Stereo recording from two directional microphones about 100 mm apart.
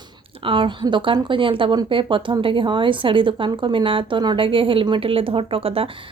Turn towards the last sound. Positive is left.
turn(degrees=-70)  # may be behind; listen again after turning